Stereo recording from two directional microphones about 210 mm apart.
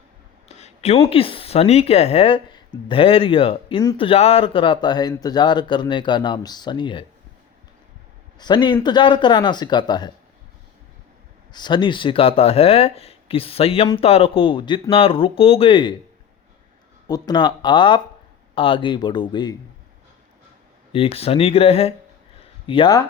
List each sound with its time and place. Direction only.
0.4 s speech: 30° left (ahead or behind)
8.4 s speech: 20° left (ahead or behind)
11.5 s speech: 20° left (ahead or behind)
17.1 s speech: 20° left (ahead or behind)
20.9 s speech: 25° left (ahead or behind)